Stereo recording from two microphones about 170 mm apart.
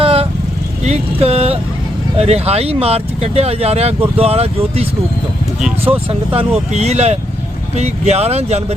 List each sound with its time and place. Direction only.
0.0 s vehicle: 35° right (ahead or behind)
0.9 s speech: 35° right (ahead or behind)